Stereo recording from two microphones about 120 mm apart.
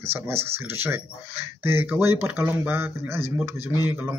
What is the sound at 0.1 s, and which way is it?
A man's voice, 20° right (ahead or behind).